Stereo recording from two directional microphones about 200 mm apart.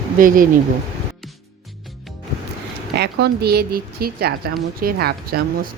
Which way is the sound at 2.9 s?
55° right (ahead or behind).